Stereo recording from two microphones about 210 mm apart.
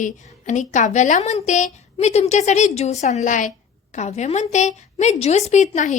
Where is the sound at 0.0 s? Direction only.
35° left (ahead or behind).